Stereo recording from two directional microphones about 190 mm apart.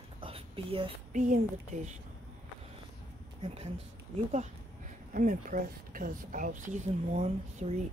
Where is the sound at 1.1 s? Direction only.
40° right (ahead or behind).